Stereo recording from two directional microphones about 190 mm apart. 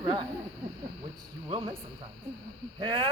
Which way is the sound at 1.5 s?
35° right (ahead or behind).